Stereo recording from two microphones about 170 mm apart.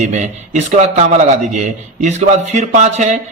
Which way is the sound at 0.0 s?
45° right (ahead or behind).